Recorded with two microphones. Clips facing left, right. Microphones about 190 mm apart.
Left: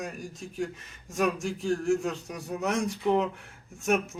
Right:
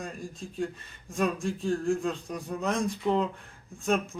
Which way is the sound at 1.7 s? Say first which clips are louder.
Left 2 dB; 15° left (ahead or behind).